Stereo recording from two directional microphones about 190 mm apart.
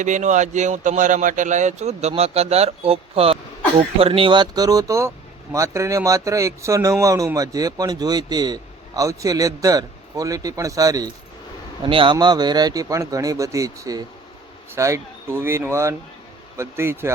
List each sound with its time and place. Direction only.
0.0 s a man's voice: 40° right (ahead or behind); by 17.1 s 15° right (ahead or behind)